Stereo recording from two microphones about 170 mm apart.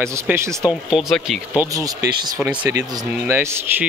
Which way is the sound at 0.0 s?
15° right (ahead or behind).